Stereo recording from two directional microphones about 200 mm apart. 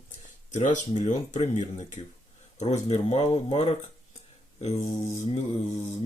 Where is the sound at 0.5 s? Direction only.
35° left (ahead or behind).